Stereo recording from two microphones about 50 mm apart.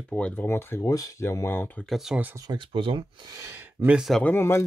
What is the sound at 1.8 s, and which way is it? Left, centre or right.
Speech, left.